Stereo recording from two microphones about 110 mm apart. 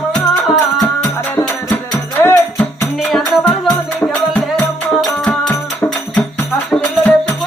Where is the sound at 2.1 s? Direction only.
20° left (ahead or behind).